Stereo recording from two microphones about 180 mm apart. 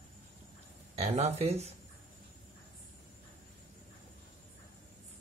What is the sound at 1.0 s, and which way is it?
Speech, 35° right (ahead or behind).